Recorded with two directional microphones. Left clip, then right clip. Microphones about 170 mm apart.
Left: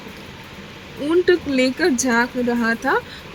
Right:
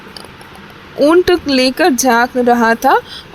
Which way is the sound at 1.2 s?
55° right (ahead or behind).